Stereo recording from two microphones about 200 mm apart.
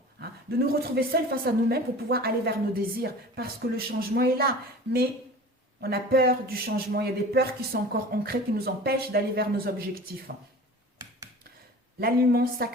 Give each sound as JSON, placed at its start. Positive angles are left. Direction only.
{"t": 0.7, "sound": "speech", "side_deg": -50}
{"t": 5.8, "sound": "speech", "side_deg": -50}
{"t": 11.9, "sound": "speech", "side_deg": -50}